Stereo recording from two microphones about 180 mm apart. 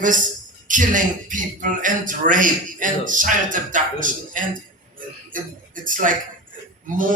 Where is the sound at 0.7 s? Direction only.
45° right (ahead or behind).